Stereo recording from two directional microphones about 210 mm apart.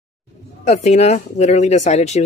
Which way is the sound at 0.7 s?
35° left (ahead or behind).